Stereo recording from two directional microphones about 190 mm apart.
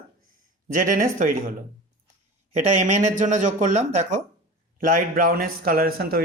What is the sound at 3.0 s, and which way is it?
Speech, 40° right (ahead or behind).